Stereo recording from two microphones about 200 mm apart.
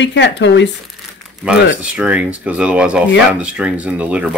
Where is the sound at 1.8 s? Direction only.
5° right (ahead or behind).